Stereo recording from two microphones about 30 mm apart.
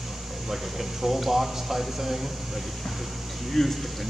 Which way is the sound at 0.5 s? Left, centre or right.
Centre.